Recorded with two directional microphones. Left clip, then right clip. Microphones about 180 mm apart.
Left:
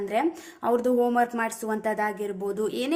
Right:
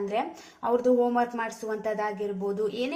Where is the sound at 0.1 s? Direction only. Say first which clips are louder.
Left 4 dB; 30° left (ahead or behind).